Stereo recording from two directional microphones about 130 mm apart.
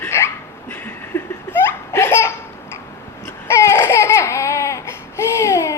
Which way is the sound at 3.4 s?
20° left (ahead or behind).